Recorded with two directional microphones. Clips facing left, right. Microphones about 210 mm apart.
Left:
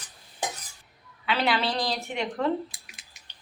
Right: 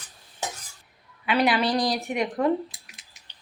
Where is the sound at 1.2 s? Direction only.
15° right (ahead or behind).